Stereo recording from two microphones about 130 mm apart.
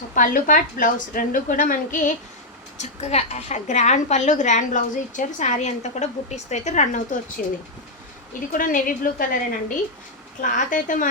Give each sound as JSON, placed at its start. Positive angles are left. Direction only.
{"t": 0.1, "sound": "a woman's voice", "side_deg": 90}
{"t": 2.7, "sound": "a woman's voice", "side_deg": 60}
{"t": 7.4, "sound": "a woman's voice", "side_deg": 90}